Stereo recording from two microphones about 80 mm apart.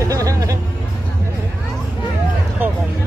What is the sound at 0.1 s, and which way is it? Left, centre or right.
Music, right.